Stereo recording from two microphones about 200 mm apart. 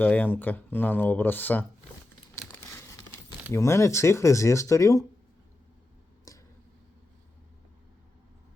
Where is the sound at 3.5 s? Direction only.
15° left (ahead or behind).